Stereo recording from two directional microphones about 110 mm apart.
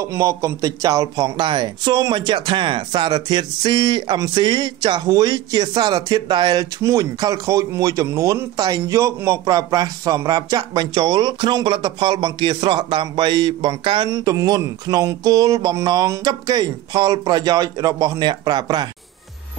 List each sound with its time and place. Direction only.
0.0 s speech: 30° right (ahead or behind)